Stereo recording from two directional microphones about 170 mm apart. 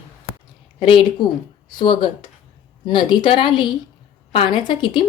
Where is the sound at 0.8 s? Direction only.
30° left (ahead or behind).